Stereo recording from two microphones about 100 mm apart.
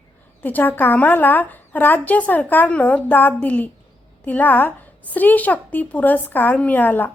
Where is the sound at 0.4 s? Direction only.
20° left (ahead or behind).